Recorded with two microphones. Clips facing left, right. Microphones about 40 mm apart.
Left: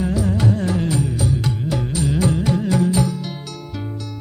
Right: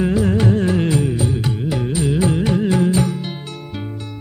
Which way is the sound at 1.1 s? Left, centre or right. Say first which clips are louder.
Right 1 dB; right.